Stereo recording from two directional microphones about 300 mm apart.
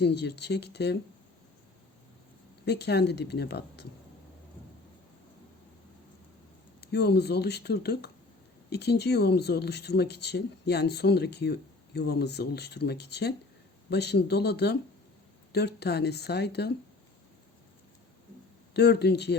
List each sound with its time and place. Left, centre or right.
0.0 s speech: left
2.6 s speech: left
6.8 s speech: left
18.7 s speech: left